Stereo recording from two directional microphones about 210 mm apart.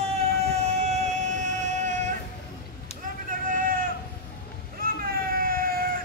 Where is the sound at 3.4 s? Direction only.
40° right (ahead or behind).